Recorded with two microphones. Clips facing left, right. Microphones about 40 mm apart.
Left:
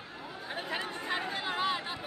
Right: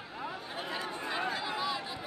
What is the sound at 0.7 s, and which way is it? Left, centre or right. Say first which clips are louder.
Chatter: left 2 dB; left.